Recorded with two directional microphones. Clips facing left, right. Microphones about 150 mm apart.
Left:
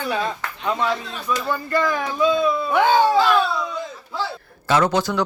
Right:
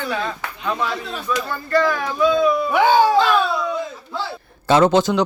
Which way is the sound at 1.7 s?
15° left (ahead or behind).